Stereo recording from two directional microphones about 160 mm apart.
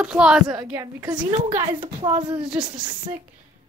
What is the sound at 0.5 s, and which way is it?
Speech, 20° right (ahead or behind).